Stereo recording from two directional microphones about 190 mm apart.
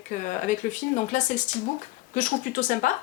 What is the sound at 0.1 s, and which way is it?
A woman's voice, 40° left (ahead or behind).